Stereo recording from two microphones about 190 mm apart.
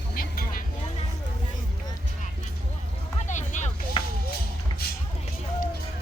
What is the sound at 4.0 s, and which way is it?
Music, 25° left (ahead or behind).